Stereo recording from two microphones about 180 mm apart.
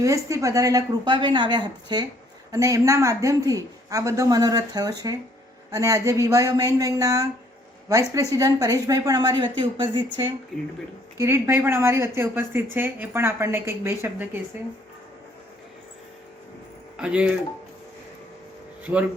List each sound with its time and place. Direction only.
0.0 s speech: 15° right (ahead or behind)
10.5 s speech: 5° left (ahead or behind)
11.2 s a woman's voice: 15° right (ahead or behind)
17.0 s a woman's voice: 5° right (ahead or behind)